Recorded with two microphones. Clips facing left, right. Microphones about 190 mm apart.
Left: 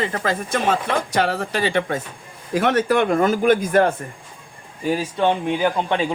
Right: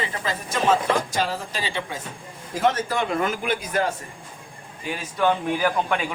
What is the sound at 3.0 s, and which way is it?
Speech, 45° left (ahead or behind).